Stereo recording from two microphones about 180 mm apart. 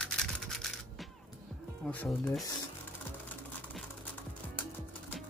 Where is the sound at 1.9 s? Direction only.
10° left (ahead or behind).